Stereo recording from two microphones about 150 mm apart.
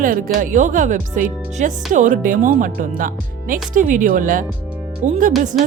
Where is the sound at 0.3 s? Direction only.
60° right (ahead or behind).